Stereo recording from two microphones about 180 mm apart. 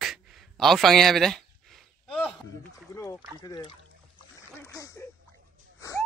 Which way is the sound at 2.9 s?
15° left (ahead or behind).